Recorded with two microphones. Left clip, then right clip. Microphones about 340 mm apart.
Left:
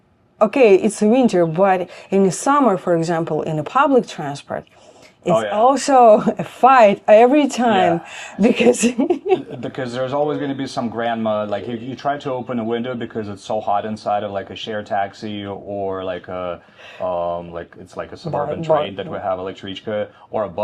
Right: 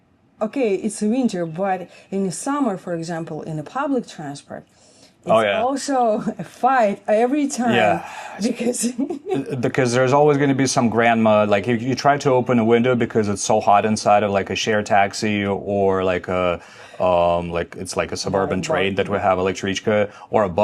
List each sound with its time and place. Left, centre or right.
0.3 s a woman's voice: left
9.6 s speech: right